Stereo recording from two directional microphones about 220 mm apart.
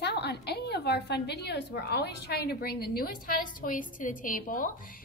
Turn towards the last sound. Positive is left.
turn(degrees=40)  # may be behind; listen again after turning